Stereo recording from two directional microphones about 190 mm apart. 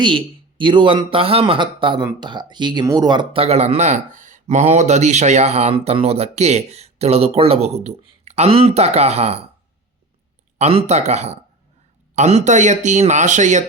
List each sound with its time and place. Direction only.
0.0 s speech: 25° right (ahead or behind)
10.6 s speech: 35° right (ahead or behind)